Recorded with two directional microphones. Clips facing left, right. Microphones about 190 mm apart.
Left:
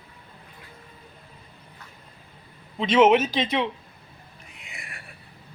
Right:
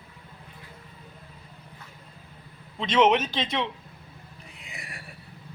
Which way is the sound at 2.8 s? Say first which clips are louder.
Left 4 dB; 5° left (ahead or behind).